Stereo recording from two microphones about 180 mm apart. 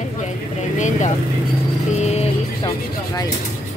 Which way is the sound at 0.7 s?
45° left (ahead or behind).